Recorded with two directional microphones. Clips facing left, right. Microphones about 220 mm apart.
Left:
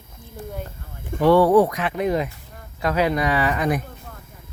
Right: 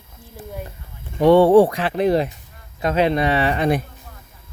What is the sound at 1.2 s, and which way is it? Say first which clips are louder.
Speech: right 3 dB; 20° right (ahead or behind).